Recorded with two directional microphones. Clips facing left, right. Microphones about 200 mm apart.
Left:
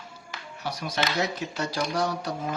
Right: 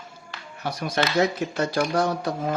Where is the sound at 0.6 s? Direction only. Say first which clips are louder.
Right 4 dB; 55° right (ahead or behind).